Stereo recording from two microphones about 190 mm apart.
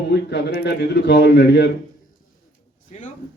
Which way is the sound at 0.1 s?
60° left (ahead or behind).